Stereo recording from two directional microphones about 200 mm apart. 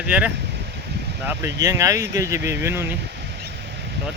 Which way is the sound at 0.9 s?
60° right (ahead or behind).